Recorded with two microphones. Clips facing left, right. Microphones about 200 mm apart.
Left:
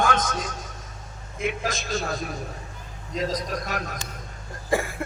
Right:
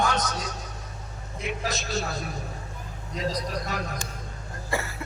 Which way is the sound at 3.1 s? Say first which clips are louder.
Left 2 dB; 45° left (ahead or behind).